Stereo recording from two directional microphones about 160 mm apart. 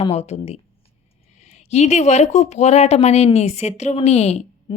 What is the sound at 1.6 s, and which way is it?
A woman's voice, 45° left (ahead or behind).